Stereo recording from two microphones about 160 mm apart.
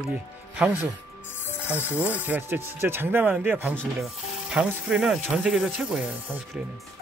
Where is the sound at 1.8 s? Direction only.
10° right (ahead or behind).